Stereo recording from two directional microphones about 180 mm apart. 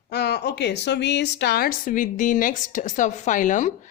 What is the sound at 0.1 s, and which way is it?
A woman's voice, 60° left (ahead or behind).